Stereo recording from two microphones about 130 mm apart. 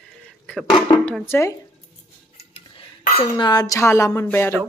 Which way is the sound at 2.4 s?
50° left (ahead or behind).